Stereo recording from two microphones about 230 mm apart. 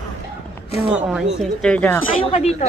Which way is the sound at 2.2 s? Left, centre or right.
Left.